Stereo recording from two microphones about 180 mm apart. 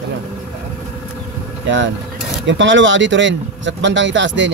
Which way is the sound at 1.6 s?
90° right.